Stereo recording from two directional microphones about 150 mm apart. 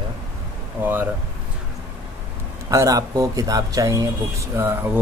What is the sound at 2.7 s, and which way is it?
Speech, 20° right (ahead or behind).